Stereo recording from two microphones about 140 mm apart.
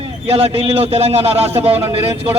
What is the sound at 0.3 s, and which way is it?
A man's voice, 45° right (ahead or behind).